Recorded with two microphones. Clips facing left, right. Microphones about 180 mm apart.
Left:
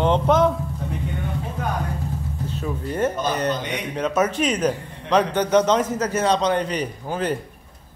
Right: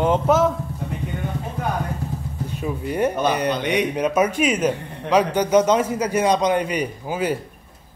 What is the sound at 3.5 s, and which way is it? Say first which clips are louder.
Speech: right 7 dB; 70° right (ahead or behind).